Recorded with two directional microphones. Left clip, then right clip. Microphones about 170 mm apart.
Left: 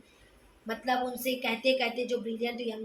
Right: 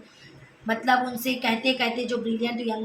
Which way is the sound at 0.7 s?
25° right (ahead or behind).